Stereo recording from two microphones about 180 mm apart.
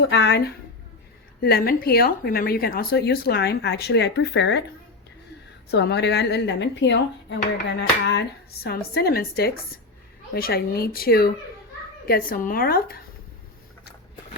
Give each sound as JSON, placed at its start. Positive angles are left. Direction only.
{"t": 0.1, "sound": "speech", "side_deg": 70}
{"t": 1.4, "sound": "speech", "side_deg": 60}
{"t": 5.7, "sound": "speech", "side_deg": 70}